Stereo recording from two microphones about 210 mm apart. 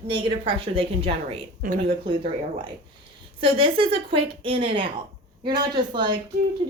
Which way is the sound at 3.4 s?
25° right (ahead or behind).